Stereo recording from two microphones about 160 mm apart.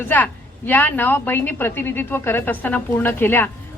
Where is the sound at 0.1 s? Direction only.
10° left (ahead or behind).